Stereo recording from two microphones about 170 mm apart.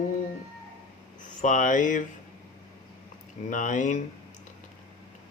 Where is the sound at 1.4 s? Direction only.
50° left (ahead or behind).